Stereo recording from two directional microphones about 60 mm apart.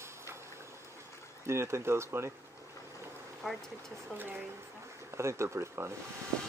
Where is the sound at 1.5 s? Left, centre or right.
Right.